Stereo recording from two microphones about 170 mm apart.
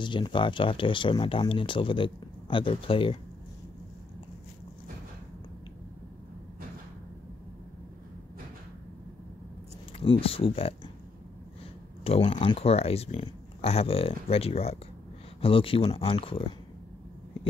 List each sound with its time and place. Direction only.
0.0 s speech: 30° left (ahead or behind)
9.9 s speech: 35° left (ahead or behind)
12.0 s speech: 35° left (ahead or behind)